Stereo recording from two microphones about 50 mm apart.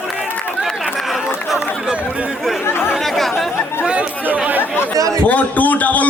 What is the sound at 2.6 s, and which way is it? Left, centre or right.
Chatter, left.